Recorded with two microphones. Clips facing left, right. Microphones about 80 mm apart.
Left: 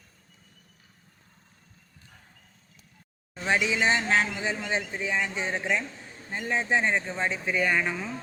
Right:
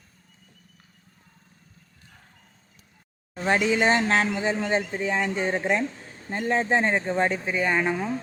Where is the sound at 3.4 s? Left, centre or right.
Right.